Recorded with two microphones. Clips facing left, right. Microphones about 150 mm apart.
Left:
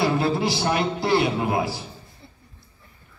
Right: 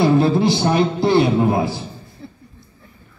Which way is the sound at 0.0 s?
25° right (ahead or behind).